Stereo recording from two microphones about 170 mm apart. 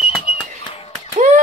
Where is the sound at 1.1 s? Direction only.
45° right (ahead or behind).